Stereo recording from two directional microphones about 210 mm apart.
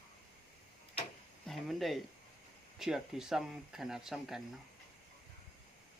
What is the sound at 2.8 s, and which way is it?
Speech, 5° right (ahead or behind).